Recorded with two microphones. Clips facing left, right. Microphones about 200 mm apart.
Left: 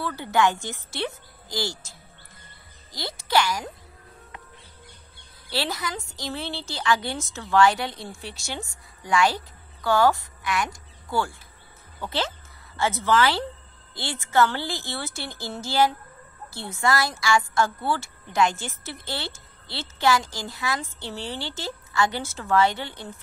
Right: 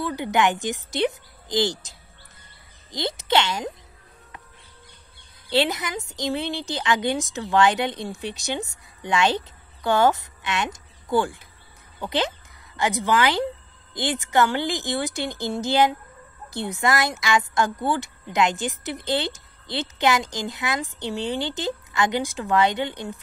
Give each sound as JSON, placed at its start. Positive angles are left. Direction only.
{"t": 0.0, "sound": "a woman's voice", "side_deg": -15}
{"t": 5.5, "sound": "a woman's voice", "side_deg": -20}